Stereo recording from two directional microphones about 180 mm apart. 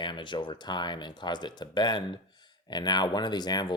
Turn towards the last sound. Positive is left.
turn(degrees=25)  # may be behind; listen again after turning